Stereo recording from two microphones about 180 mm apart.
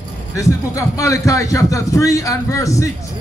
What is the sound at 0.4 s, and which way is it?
A man's voice, 15° left (ahead or behind).